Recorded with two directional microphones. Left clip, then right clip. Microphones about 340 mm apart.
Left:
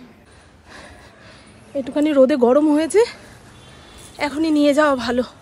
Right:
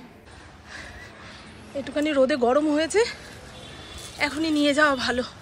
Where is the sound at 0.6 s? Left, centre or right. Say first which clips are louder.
Even; centre.